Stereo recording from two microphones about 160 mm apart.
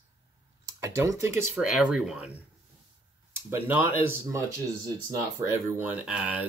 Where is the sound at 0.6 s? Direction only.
20° right (ahead or behind).